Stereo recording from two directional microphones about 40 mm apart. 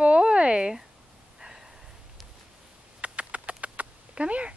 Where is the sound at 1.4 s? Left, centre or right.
Centre.